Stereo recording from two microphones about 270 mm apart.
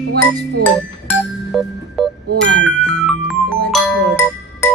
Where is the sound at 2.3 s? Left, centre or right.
Right.